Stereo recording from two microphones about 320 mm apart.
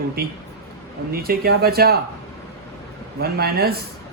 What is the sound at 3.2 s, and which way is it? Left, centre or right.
Speech, right.